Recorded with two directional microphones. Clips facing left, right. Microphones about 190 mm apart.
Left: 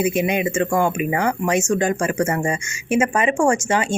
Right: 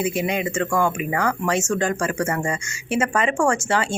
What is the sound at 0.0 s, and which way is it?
Speech, 20° left (ahead or behind).